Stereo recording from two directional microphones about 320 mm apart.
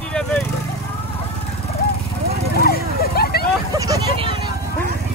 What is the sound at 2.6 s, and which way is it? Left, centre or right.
Vehicle, left.